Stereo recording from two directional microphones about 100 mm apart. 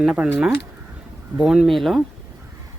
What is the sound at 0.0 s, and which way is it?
Speech, 10° right (ahead or behind).